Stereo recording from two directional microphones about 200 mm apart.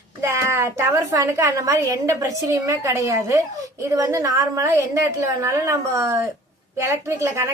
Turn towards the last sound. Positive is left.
turn(degrees=-15)  # may be behind; listen again after turning